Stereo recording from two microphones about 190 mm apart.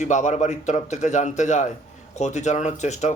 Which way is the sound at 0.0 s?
40° left (ahead or behind).